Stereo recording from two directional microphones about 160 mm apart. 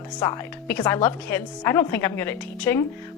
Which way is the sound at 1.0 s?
15° left (ahead or behind).